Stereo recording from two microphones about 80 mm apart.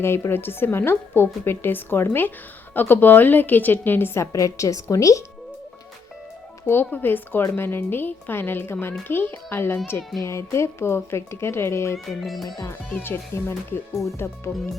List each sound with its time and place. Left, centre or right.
0.0 s a woman's voice: left
6.7 s a woman's voice: left
12.2 s speech: centre
12.6 s a woman's voice: left